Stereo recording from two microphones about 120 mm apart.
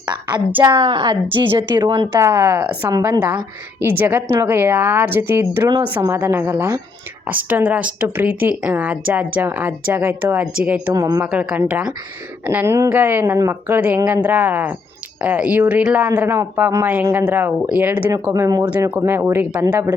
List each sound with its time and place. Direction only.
0.1 s a woman's voice: 40° right (ahead or behind); by 2.9 s 15° right (ahead or behind)
2.9 s speech: 30° right (ahead or behind); by 10.9 s 10° right (ahead or behind)
10.9 s speech: 30° right (ahead or behind)
11.3 s speech: 10° right (ahead or behind)
18.1 s speech: 25° right (ahead or behind)